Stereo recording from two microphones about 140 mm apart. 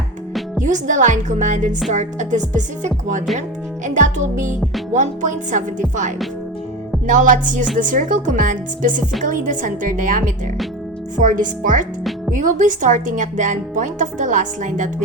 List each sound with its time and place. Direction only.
0.6 s a woman's voice: 60° right (ahead or behind)